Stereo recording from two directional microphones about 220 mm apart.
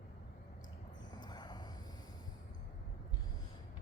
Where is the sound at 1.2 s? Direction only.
20° left (ahead or behind).